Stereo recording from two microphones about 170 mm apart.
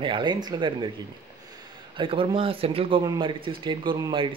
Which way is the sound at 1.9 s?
30° right (ahead or behind).